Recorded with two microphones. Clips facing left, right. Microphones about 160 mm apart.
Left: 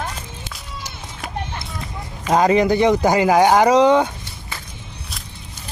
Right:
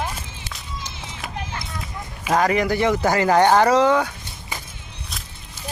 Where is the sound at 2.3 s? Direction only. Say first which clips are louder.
Left 4 dB; 20° left (ahead or behind).